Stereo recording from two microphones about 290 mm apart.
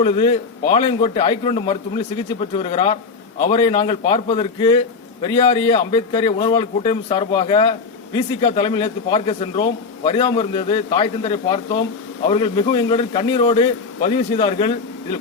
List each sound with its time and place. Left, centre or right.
0.0 s a man's voice: centre